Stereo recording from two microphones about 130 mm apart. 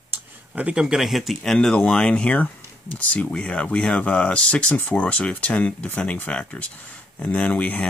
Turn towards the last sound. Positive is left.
turn(degrees=10)  # may be behind; listen again after turning